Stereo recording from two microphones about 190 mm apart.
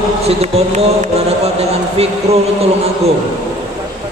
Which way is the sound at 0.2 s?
35° right (ahead or behind).